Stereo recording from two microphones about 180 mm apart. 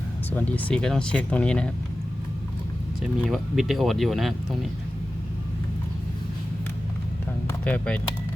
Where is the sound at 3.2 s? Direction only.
Centre (ahead or behind).